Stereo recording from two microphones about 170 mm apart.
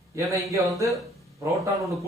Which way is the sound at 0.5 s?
20° right (ahead or behind).